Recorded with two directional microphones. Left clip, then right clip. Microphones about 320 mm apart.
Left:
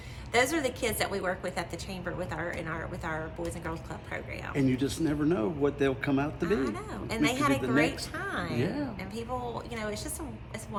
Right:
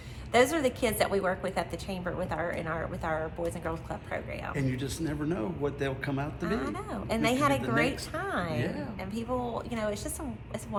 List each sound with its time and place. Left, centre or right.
0.3 s a woman's voice: centre
4.5 s a man's voice: centre
6.4 s a woman's voice: centre
8.6 s a man's voice: centre
9.1 s a woman's voice: centre